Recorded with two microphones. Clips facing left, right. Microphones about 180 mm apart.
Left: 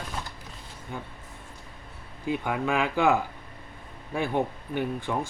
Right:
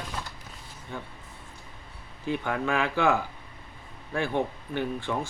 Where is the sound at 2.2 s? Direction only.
15° left (ahead or behind).